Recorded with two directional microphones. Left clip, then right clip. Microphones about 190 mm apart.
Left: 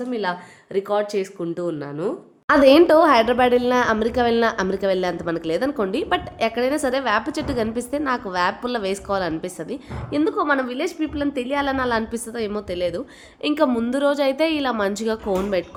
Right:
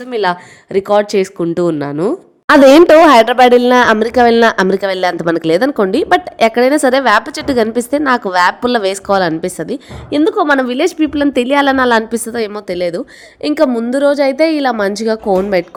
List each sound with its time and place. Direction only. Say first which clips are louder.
0.1 s a woman's voice: right 15 dB; 50° right (ahead or behind)